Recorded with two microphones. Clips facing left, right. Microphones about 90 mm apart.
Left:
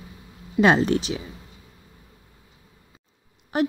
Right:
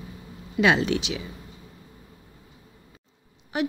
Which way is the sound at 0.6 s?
40° left (ahead or behind).